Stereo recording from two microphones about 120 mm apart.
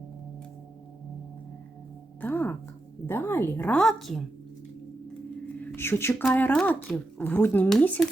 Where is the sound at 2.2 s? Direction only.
15° left (ahead or behind).